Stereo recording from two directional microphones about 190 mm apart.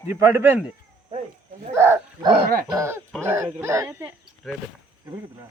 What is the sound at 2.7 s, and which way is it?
A man's voice, 15° right (ahead or behind).